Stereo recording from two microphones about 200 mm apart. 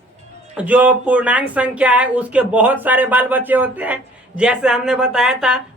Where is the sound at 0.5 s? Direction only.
5° right (ahead or behind).